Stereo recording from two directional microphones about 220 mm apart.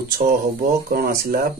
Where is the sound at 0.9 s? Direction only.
40° right (ahead or behind).